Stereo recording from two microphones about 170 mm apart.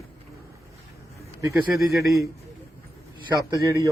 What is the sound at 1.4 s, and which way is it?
Speech, 15° right (ahead or behind).